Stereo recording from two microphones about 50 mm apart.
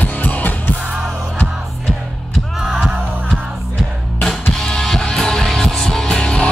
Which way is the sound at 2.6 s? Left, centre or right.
Centre.